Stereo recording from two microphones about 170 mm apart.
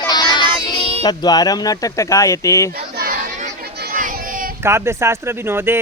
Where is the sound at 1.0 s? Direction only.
25° left (ahead or behind).